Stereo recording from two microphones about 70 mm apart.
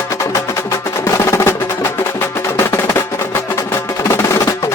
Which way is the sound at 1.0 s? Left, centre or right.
Left.